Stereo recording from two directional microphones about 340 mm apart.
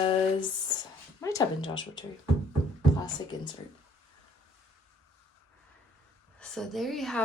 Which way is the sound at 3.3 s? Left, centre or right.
Centre.